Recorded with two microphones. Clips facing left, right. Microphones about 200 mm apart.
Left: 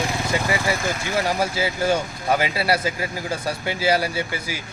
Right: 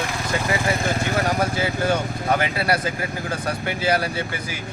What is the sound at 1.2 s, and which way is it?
Speech, 10° left (ahead or behind).